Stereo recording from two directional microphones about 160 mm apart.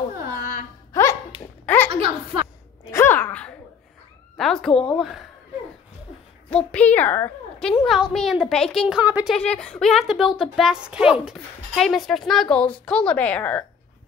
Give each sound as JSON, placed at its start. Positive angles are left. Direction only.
{"t": 0.9, "sound": "music", "side_deg": 20}
{"t": 1.9, "sound": "a sound", "side_deg": -35}
{"t": 2.9, "sound": "a sound", "side_deg": 15}
{"t": 4.4, "sound": "speech", "side_deg": 5}
{"t": 6.5, "sound": "a woman's voice", "side_deg": 10}
{"t": 7.7, "sound": "speech", "side_deg": 0}
{"t": 9.3, "sound": "speech", "side_deg": 5}